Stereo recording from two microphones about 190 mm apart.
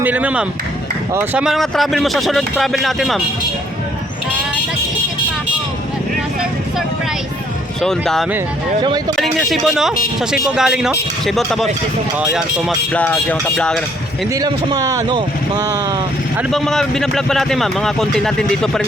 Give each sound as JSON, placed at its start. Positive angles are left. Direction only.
{"t": 0.0, "sound": "speech", "side_deg": -10}
{"t": 7.8, "sound": "speech", "side_deg": 0}
{"t": 8.8, "sound": "speech", "side_deg": -25}
{"t": 9.1, "sound": "speech", "side_deg": 0}
{"t": 12.9, "sound": "speech", "side_deg": 10}
{"t": 14.3, "sound": "speech", "side_deg": -20}
{"t": 16.4, "sound": "speech", "side_deg": 0}